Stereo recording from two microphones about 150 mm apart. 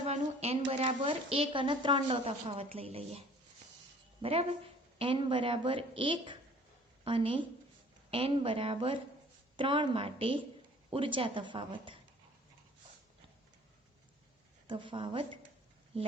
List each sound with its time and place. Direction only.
0.0 s a sound: 45° right (ahead or behind)
1.0 s a woman's voice: 35° right (ahead or behind)
14.7 s a woman's voice: 35° right (ahead or behind)